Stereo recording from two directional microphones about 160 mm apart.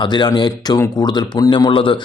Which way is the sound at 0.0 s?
25° left (ahead or behind).